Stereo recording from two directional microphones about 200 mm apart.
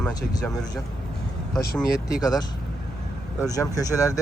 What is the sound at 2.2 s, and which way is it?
Speech, 20° left (ahead or behind).